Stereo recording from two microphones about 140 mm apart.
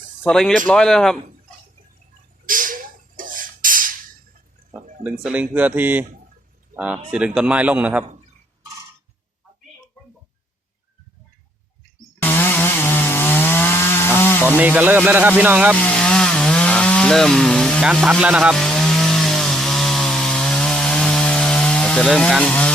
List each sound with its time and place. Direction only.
0.2 s a man's voice: 5° left (ahead or behind)
2.5 s a sound: 75° right (ahead or behind)
5.0 s speech: 10° right (ahead or behind)
12.2 s chainsaw: 15° left (ahead or behind)
14.6 s speech: 10° right (ahead or behind)
15.7 s chainsaw: 5° left (ahead or behind)